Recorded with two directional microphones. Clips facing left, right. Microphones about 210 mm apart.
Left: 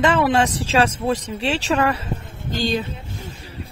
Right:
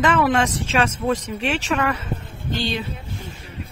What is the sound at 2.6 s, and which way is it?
Music, 40° left (ahead or behind).